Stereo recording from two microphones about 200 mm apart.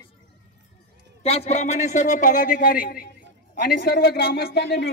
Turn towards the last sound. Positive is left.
turn(degrees=55)  # may be behind; listen again after turning